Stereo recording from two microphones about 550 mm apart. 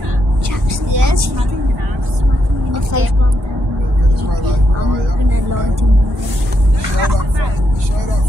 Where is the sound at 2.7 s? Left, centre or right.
Right.